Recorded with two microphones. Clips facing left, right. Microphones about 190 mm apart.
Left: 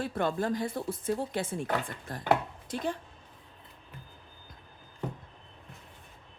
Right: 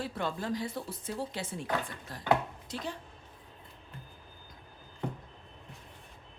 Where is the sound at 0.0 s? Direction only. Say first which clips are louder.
Left 5 dB; 50° left (ahead or behind).